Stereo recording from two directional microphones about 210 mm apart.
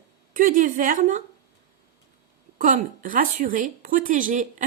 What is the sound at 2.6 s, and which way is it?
A woman's voice, 35° right (ahead or behind).